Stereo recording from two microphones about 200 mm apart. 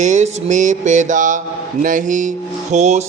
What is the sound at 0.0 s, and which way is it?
A man's voice, 35° right (ahead or behind).